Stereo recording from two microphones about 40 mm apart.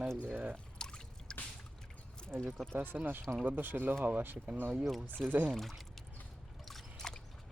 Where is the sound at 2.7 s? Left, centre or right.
Right.